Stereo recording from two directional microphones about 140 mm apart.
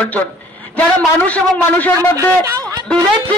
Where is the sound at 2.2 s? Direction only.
25° right (ahead or behind).